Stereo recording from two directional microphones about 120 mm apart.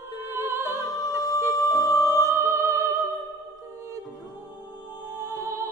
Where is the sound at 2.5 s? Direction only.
25° right (ahead or behind).